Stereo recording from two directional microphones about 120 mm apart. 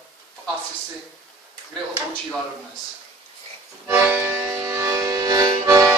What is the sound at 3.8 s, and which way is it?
Accordion, 15° right (ahead or behind).